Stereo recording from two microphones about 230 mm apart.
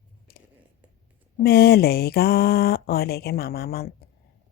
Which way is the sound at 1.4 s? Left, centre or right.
Left.